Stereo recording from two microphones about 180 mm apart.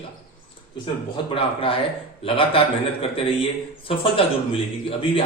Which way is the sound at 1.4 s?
30° left (ahead or behind).